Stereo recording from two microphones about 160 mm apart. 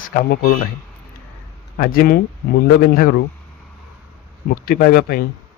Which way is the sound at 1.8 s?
70° left (ahead or behind).